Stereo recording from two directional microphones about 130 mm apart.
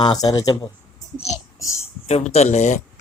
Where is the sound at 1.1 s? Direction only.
55° left (ahead or behind).